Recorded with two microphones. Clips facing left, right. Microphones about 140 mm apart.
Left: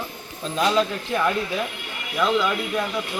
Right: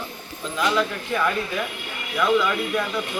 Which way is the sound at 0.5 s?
25° left (ahead or behind).